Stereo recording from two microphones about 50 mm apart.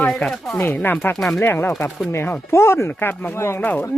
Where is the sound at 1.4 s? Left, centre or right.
Left.